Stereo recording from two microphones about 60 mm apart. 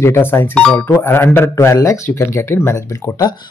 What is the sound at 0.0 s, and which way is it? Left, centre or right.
Speech, left.